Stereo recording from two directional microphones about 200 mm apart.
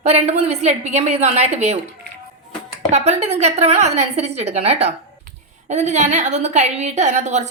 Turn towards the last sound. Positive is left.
turn(degrees=-35)  # may be behind; listen again after turning